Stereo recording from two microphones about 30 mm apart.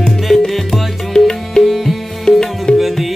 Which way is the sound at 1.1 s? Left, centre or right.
Centre.